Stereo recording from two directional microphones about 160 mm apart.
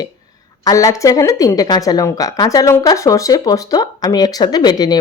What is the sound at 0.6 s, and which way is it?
A woman's voice, 20° left (ahead or behind).